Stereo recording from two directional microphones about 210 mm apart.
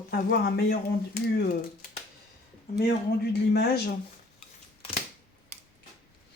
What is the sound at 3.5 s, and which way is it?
Speech, 50° left (ahead or behind).